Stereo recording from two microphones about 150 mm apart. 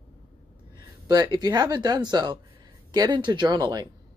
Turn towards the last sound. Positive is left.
turn(degrees=-30)  # may be behind; listen again after turning